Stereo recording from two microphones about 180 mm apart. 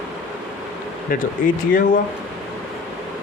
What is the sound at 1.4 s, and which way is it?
Speech, 50° left (ahead or behind).